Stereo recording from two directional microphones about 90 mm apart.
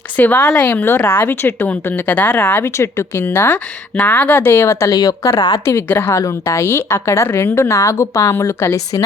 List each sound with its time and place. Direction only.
0.2 s a woman's voice: 20° left (ahead or behind); by 5.3 s 45° left (ahead or behind)
5.6 s a woman's voice: 25° left (ahead or behind)